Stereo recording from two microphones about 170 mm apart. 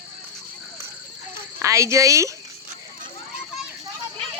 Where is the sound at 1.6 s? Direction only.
15° right (ahead or behind).